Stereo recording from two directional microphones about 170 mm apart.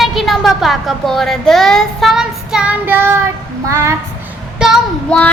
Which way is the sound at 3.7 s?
15° right (ahead or behind).